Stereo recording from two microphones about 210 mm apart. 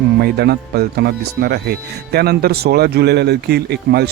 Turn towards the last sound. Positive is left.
turn(degrees=-50)  # may be behind; listen again after turning